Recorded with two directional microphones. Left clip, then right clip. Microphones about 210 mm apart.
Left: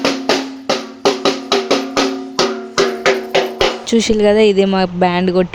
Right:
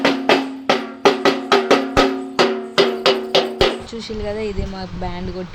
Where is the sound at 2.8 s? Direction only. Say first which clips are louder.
Left 2 dB; 35° left (ahead or behind).